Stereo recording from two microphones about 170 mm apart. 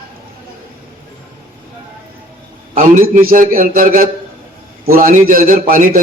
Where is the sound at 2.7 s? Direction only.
50° right (ahead or behind).